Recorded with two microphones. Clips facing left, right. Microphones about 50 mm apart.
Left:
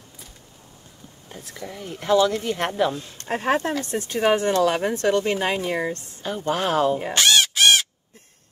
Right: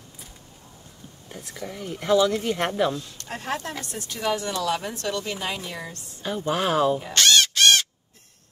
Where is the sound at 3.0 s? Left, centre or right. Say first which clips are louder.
Left 8 dB; left.